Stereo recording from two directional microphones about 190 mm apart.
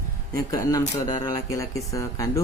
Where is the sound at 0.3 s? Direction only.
15° left (ahead or behind).